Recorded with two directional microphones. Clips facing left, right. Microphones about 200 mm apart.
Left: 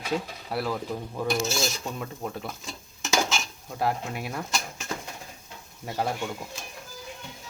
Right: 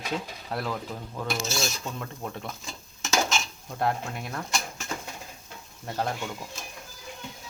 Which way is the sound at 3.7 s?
5° left (ahead or behind).